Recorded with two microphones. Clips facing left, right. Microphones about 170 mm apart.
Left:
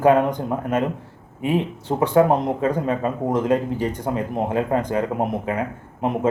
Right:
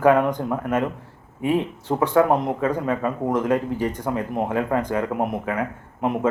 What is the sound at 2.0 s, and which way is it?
Speech, 25° left (ahead or behind).